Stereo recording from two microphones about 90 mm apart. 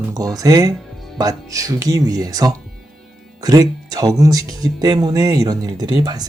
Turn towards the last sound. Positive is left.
turn(degrees=-50)  # may be behind; listen again after turning